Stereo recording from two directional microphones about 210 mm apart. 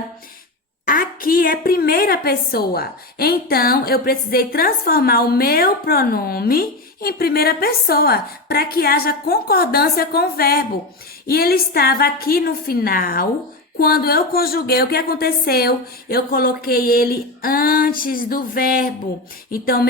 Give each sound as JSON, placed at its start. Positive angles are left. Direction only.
{"t": 0.9, "sound": "a woman's voice", "side_deg": 40}